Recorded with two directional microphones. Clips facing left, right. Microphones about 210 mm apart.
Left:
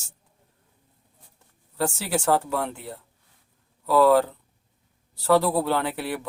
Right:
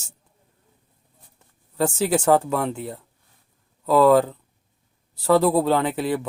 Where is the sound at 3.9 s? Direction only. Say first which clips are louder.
Right 2 dB; 15° right (ahead or behind).